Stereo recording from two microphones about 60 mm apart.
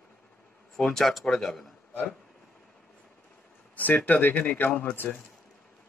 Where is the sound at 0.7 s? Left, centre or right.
Centre.